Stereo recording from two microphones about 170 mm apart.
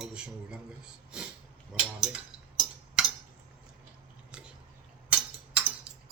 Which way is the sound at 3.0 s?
5° right (ahead or behind).